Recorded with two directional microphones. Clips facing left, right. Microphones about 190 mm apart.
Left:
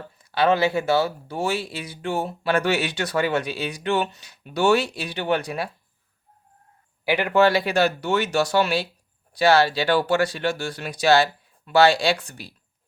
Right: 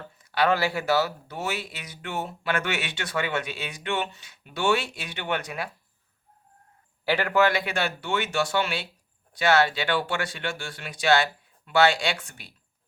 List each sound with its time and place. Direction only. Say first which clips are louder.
0.3 s speech: left 4 dB; 25° left (ahead or behind)
7.0 s speech: left 2 dB; 15° left (ahead or behind)
7.3 s speech: left 6 dB; 30° left (ahead or behind)